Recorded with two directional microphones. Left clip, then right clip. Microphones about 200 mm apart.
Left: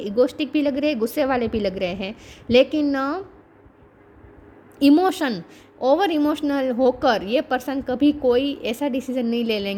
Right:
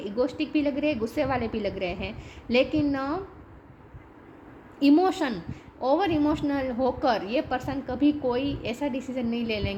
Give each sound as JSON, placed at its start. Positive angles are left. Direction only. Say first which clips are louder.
{"t": 0.0, "sound": "a woman's voice", "louder": "left 7 dB", "side_deg": 55}
{"t": 4.8, "sound": "a woman's voice", "louder": "left 4 dB", "side_deg": 55}